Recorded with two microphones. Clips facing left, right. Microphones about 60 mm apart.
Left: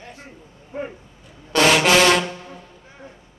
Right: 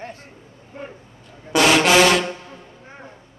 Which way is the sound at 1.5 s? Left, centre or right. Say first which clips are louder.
Right 1 dB; centre.